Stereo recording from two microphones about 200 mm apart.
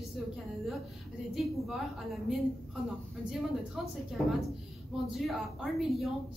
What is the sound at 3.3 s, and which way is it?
Speech, centre (ahead or behind).